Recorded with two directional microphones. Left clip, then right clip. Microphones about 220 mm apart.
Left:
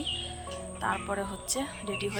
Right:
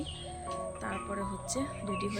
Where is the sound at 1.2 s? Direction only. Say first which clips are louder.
Left 2 dB; 5° right (ahead or behind).